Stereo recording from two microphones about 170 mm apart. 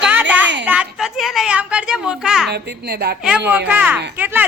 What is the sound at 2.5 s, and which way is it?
Speech, 70° right (ahead or behind).